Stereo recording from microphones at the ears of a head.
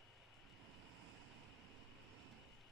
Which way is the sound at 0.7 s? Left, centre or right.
Right.